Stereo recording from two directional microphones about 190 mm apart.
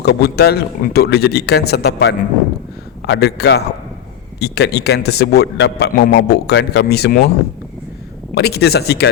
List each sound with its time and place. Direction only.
0.0 s a man's voice: 60° left (ahead or behind)
8.4 s a man's voice: 60° left (ahead or behind)